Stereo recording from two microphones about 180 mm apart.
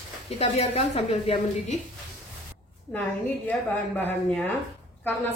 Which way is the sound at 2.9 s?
10° left (ahead or behind).